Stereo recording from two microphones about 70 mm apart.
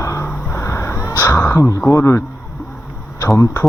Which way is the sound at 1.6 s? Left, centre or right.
Left.